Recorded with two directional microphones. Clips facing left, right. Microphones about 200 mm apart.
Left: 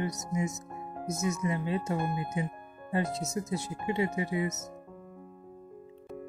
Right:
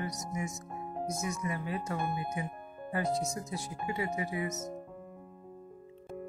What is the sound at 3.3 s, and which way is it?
Speech, 25° left (ahead or behind).